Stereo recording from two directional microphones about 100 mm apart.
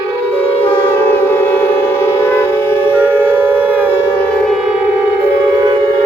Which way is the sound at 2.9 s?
15° right (ahead or behind).